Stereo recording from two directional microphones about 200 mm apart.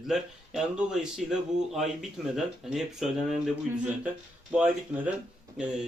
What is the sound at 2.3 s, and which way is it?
Speech, centre (ahead or behind).